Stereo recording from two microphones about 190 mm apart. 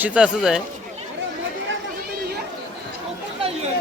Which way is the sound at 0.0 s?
5° right (ahead or behind).